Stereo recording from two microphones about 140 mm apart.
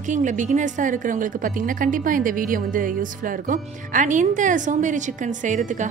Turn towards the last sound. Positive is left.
turn(degrees=-65)  # may be behind; listen again after turning